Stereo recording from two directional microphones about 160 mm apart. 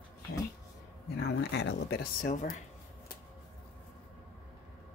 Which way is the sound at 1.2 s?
90° left.